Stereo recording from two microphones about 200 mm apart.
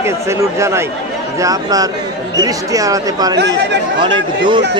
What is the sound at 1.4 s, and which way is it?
Speech, 20° right (ahead or behind).